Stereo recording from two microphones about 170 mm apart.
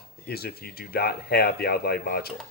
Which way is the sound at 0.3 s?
65° left (ahead or behind).